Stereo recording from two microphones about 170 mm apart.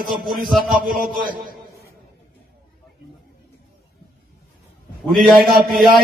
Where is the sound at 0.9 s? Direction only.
55° right (ahead or behind).